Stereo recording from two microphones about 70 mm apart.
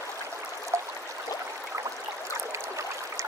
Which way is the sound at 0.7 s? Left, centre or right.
Right.